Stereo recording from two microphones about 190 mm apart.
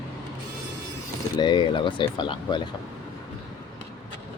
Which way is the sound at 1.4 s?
25° left (ahead or behind).